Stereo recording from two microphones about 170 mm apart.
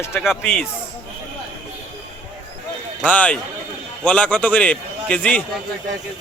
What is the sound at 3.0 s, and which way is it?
A man's voice, 10° left (ahead or behind).